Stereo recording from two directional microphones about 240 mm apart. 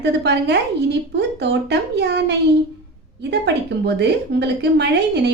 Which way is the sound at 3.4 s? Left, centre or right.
Right.